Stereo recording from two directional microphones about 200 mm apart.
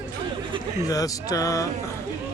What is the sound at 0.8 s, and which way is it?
Speech, 15° left (ahead or behind).